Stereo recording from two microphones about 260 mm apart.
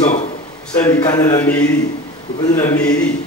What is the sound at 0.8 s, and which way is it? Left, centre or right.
Speech, centre.